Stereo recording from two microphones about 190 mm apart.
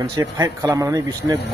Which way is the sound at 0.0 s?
20° right (ahead or behind).